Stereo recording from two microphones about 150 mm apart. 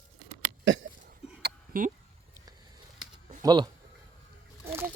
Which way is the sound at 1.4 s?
80° right.